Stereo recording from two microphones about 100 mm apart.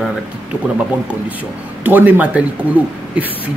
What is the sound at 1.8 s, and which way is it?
Speech, 20° right (ahead or behind).